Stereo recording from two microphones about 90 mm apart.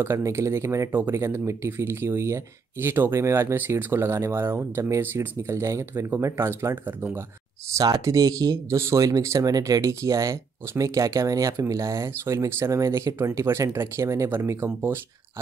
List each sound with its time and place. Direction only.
0.0 s speech: 30° right (ahead or behind)
7.7 s speech: 40° right (ahead or behind)